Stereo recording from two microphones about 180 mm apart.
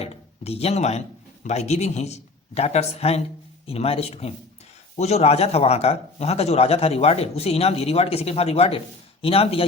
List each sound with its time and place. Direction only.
0.0 s speech: 35° left (ahead or behind)